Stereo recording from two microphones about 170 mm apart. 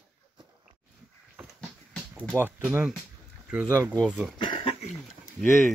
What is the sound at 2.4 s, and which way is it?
Speech, 10° right (ahead or behind).